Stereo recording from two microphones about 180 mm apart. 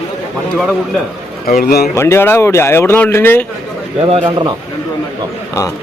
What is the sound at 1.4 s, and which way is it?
Speech, 55° left (ahead or behind).